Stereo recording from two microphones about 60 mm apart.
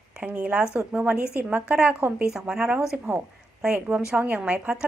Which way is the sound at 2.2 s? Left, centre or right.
Centre.